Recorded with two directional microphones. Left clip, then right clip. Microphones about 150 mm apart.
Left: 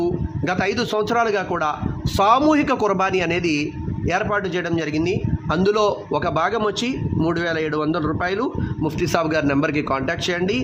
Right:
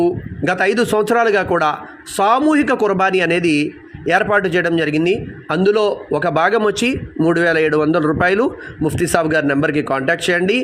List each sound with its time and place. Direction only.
0.0 s a man's voice: 20° right (ahead or behind)
2.1 s a man's voice: 10° right (ahead or behind); by 5.2 s 30° right (ahead or behind)
5.5 s a man's voice: 5° right (ahead or behind)